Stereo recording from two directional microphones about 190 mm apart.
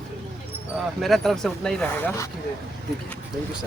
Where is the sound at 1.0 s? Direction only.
Centre (ahead or behind).